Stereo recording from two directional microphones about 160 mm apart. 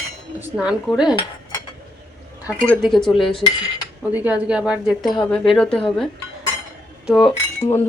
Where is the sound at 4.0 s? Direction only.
10° right (ahead or behind).